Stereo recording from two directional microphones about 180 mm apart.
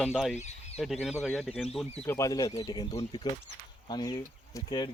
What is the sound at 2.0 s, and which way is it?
Speech, 15° left (ahead or behind).